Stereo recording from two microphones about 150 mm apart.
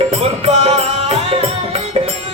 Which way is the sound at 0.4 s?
40° right (ahead or behind).